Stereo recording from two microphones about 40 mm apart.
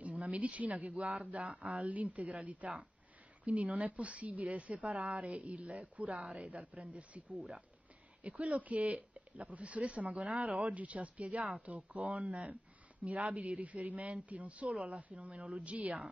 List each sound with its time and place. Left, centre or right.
0.0 s speech: right